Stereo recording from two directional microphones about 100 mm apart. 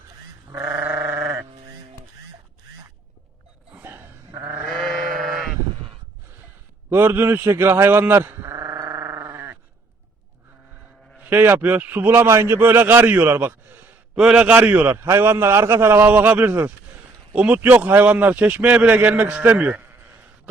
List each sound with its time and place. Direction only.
0.6 s sheep: 20° right (ahead or behind)
3.7 s a sound: 20° right (ahead or behind)
4.3 s sheep: 45° right (ahead or behind)
4.7 s sheep: 5° left (ahead or behind)
6.9 s sheep: 20° right (ahead or behind)
11.2 s a man's voice: 15° right (ahead or behind)
14.2 s a man's voice: 10° right (ahead or behind)